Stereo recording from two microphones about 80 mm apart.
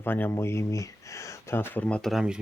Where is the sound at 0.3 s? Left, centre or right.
Left.